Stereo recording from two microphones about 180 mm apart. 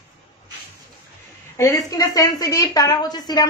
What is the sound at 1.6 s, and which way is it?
Speech, 15° left (ahead or behind).